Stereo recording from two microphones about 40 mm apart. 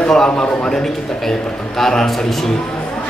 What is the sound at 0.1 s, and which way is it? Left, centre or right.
Speech, centre.